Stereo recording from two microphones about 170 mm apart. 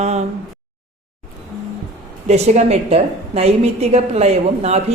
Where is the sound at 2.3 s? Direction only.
40° right (ahead or behind).